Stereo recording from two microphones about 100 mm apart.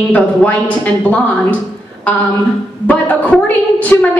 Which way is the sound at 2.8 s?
15° left (ahead or behind).